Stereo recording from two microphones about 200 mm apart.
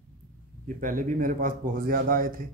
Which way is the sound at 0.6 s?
40° right (ahead or behind).